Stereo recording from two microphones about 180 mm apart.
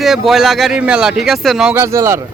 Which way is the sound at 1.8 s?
15° right (ahead or behind).